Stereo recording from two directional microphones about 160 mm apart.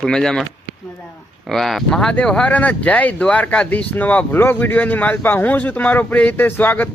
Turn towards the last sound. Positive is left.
turn(degrees=10)  # may be behind; listen again after turning